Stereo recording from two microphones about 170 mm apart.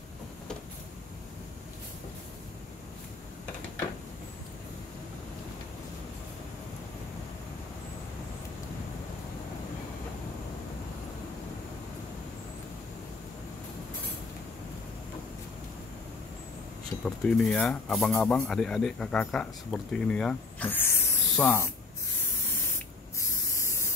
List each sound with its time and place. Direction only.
17.0 s speech: 5° left (ahead or behind)
23.1 s spray: 20° left (ahead or behind)